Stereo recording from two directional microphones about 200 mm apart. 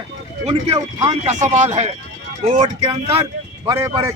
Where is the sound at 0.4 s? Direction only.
30° right (ahead or behind).